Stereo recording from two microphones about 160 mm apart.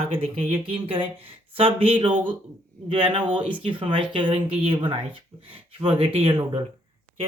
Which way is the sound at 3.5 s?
30° right (ahead or behind).